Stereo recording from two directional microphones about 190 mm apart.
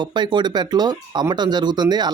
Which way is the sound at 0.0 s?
25° right (ahead or behind).